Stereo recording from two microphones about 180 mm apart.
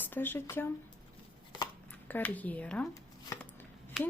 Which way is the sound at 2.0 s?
10° left (ahead or behind).